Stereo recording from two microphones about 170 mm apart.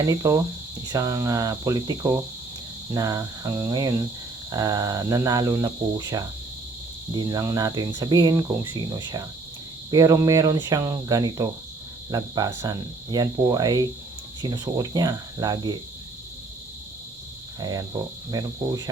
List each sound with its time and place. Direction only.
0.0 s speech: 20° right (ahead or behind)
17.6 s speech: 20° right (ahead or behind)